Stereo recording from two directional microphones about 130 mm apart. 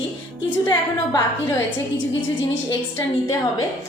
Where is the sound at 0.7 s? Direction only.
30° left (ahead or behind).